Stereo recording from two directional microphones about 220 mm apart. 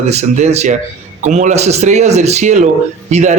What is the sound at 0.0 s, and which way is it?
Speech, 30° right (ahead or behind).